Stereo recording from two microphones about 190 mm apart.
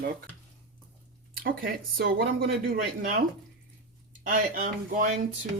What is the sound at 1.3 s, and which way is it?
Speech, 50° right (ahead or behind).